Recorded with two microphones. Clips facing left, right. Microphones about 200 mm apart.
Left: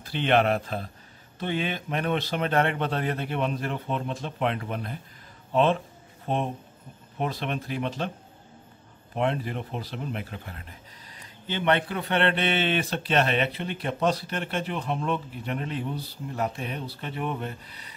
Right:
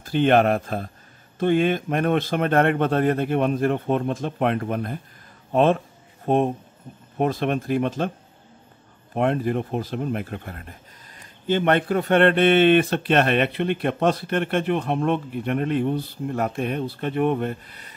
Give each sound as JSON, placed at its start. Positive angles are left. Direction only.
{"t": 0.0, "sound": "a man's voice", "side_deg": -45}
{"t": 9.1, "sound": "a man's voice", "side_deg": -50}